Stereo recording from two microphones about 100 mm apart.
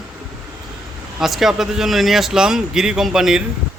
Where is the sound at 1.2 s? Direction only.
5° right (ahead or behind).